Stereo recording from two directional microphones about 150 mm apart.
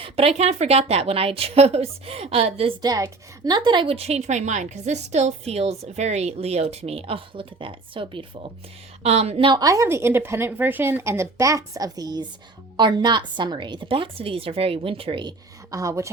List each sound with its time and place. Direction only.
0.0 s a woman's voice: 40° right (ahead or behind)
2.8 s a woman's voice: 25° right (ahead or behind)
9.0 s a woman's voice: 45° right (ahead or behind)
9.5 s a woman's voice: 25° right (ahead or behind)